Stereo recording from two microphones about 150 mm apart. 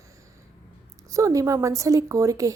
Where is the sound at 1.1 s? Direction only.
20° right (ahead or behind).